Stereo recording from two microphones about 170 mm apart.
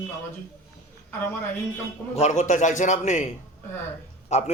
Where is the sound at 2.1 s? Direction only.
40° left (ahead or behind).